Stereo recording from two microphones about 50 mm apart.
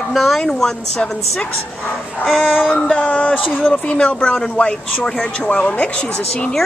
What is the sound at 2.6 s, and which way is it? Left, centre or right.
Speech, left.